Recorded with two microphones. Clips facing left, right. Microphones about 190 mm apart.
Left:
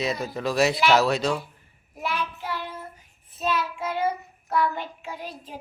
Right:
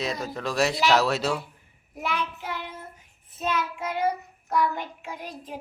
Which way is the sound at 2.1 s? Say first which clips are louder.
Even; 20° right (ahead or behind).